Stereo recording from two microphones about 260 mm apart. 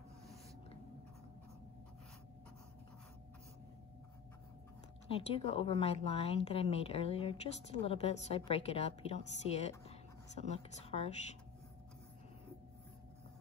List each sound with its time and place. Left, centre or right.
5.0 s a woman's voice: left